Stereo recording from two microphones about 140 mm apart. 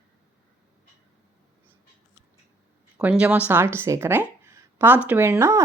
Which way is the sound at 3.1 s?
10° right (ahead or behind).